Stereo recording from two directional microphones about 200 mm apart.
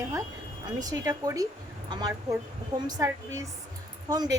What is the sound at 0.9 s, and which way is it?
Speech, 20° right (ahead or behind).